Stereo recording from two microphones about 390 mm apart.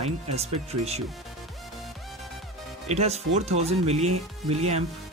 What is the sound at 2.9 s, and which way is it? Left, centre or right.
Speech, centre.